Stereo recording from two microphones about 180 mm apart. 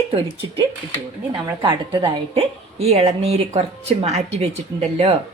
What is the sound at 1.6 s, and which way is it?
A woman's voice, 25° right (ahead or behind).